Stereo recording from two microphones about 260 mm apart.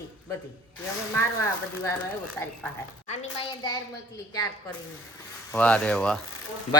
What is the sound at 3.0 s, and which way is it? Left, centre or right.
Speech, left.